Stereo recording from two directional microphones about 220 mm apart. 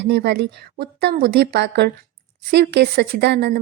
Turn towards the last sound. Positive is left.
turn(degrees=-50)  # may be behind; listen again after turning